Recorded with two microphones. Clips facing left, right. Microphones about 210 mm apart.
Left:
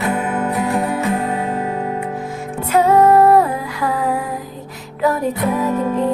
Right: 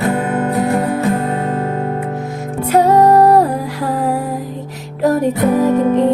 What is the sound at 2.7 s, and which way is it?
Music, 35° right (ahead or behind).